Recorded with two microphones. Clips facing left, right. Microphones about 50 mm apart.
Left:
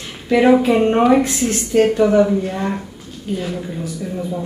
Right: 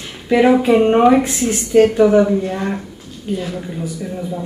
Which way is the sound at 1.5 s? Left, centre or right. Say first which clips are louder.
Right 3 dB; centre.